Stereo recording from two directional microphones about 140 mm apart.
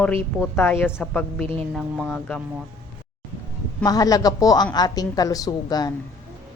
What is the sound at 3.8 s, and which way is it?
A woman's voice, 25° left (ahead or behind).